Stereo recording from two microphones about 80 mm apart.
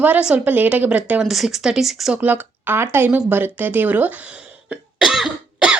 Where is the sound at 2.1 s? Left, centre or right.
Centre.